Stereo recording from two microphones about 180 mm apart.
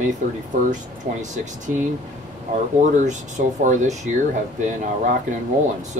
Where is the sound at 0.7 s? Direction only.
45° right (ahead or behind).